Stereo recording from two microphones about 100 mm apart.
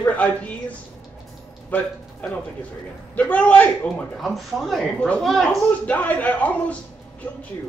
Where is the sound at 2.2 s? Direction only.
15° left (ahead or behind).